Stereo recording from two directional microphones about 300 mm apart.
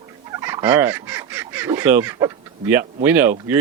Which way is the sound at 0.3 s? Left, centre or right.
Centre.